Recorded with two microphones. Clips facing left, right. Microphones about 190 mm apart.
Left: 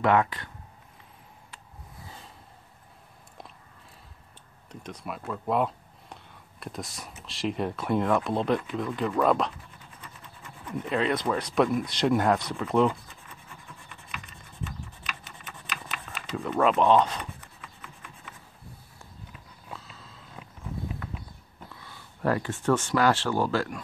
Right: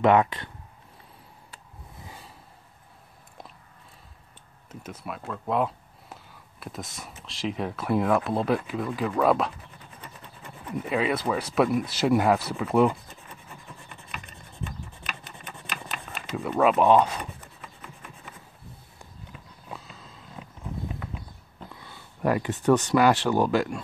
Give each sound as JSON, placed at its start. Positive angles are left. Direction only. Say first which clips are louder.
{"t": 0.0, "sound": "speech", "louder": "right 3 dB", "side_deg": -20}
{"t": 4.6, "sound": "speech", "louder": "even", "side_deg": -5}
{"t": 10.8, "sound": "speech", "louder": "right 1 dB", "side_deg": -5}
{"t": 15.6, "sound": "a sound", "louder": "right 1 dB", "side_deg": -45}
{"t": 16.3, "sound": "speech", "louder": "right 2 dB", "side_deg": -5}
{"t": 21.8, "sound": "a sound", "louder": "right 2 dB", "side_deg": -15}
{"t": 22.8, "sound": "speech", "louder": "right 3 dB", "side_deg": -15}